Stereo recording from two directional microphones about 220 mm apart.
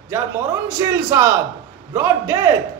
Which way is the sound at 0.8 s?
15° right (ahead or behind).